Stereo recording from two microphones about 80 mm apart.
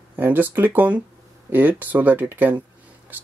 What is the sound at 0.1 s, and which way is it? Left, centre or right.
Speech, right.